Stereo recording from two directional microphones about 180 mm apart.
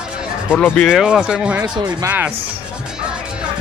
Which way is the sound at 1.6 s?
20° right (ahead or behind).